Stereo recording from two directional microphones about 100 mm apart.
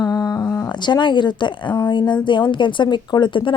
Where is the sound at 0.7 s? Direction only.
50° left (ahead or behind).